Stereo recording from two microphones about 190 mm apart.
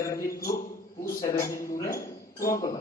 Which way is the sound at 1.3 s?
15° left (ahead or behind).